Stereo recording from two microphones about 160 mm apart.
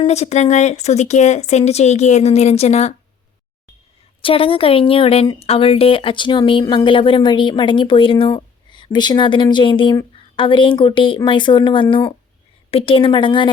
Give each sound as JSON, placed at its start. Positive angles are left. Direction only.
{"t": 0.0, "sound": "speech", "side_deg": 45}
{"t": 4.2, "sound": "a woman's voice", "side_deg": 35}